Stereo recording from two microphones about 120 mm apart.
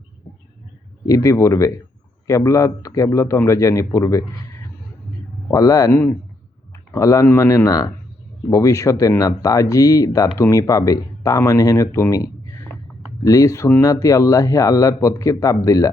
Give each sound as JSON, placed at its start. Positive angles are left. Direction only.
{"t": 1.0, "sound": "speech", "side_deg": 30}
{"t": 5.5, "sound": "speech", "side_deg": 30}
{"t": 5.9, "sound": "speech", "side_deg": 15}
{"t": 6.7, "sound": "speech", "side_deg": 25}